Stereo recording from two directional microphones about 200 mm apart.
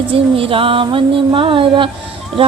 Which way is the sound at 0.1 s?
25° right (ahead or behind).